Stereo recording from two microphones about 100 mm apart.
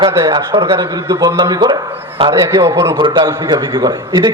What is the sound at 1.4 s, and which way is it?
A man's voice, 40° right (ahead or behind).